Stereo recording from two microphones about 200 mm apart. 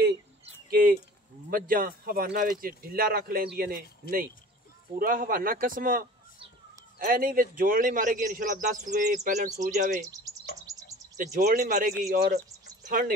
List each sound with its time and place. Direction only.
0.7 s a man's voice: 45° right (ahead or behind)
4.9 s a man's voice: 45° right (ahead or behind)
10.0 s speech: 15° right (ahead or behind)
10.7 s bird: 15° right (ahead or behind)
11.1 s a man's voice: 40° right (ahead or behind)